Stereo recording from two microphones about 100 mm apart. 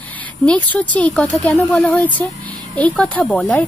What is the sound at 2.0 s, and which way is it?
A woman's voice, 15° left (ahead or behind).